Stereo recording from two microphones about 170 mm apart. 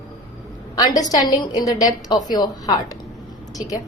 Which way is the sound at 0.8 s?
20° left (ahead or behind).